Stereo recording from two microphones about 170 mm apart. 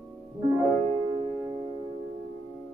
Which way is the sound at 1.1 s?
25° right (ahead or behind).